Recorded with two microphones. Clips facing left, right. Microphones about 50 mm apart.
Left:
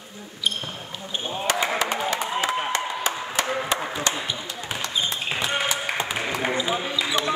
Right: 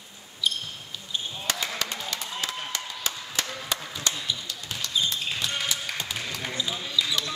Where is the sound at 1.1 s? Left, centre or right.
Left.